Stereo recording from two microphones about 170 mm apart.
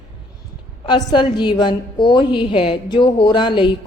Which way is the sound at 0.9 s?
25° left (ahead or behind).